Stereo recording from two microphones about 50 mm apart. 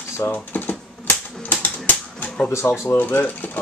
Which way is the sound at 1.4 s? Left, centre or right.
Left.